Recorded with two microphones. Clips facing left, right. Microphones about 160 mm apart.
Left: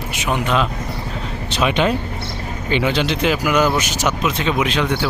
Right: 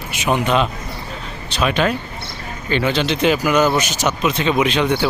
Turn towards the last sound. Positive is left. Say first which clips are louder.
# right 2 dB
turn(degrees=0)  # may be behind; listen again after turning